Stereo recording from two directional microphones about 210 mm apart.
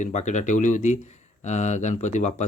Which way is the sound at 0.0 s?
35° left (ahead or behind).